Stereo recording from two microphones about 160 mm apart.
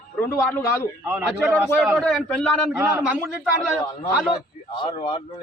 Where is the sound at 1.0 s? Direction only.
10° right (ahead or behind).